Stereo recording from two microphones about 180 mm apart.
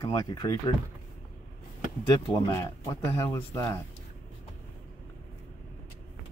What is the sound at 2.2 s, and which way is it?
Speech, 20° left (ahead or behind).